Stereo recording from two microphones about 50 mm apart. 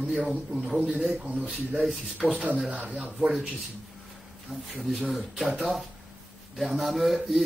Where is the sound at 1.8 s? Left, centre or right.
Centre.